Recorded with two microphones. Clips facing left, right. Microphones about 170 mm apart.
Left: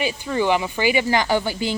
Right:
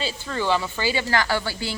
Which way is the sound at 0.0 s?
15° left (ahead or behind).